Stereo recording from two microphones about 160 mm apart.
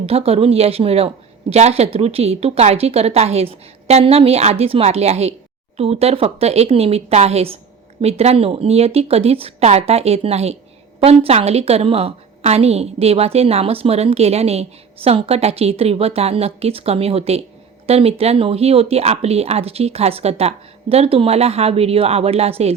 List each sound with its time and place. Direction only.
0.0 s a woman's voice: 35° right (ahead or behind)